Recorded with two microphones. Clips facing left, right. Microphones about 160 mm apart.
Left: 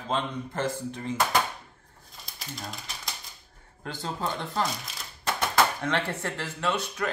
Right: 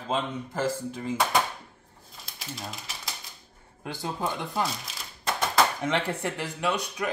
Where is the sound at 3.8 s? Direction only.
10° right (ahead or behind).